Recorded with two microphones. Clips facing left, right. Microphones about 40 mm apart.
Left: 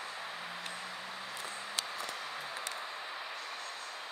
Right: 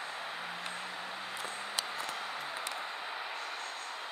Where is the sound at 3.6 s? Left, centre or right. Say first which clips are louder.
Right 2 dB; right.